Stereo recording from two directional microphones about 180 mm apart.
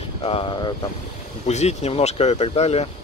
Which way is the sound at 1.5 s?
40° left (ahead or behind).